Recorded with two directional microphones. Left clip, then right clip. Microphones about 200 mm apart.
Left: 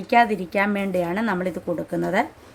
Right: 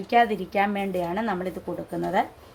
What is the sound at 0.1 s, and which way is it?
A woman's voice, 25° left (ahead or behind).